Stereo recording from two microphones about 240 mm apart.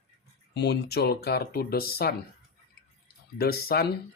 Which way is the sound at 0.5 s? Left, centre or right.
Left.